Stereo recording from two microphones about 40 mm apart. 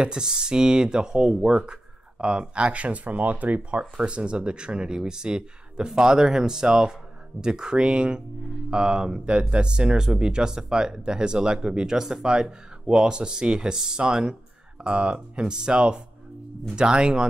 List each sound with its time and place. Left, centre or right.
0.0 s speech: centre; by 3.8 s right
3.9 s speech: right